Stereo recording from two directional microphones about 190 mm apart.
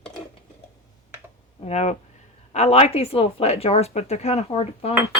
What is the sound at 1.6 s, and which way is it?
Speech, 35° left (ahead or behind).